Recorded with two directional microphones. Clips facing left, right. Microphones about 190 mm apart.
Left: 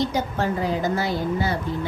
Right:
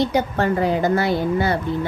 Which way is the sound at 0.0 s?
65° right (ahead or behind).